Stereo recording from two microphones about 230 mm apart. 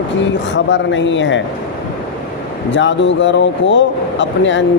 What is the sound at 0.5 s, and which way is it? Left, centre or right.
Speech, left.